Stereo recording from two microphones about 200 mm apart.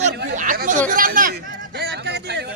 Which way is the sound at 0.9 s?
45° right (ahead or behind).